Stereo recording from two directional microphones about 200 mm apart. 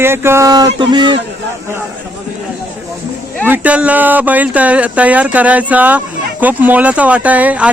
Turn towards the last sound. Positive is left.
turn(degrees=-5)  # may be behind; listen again after turning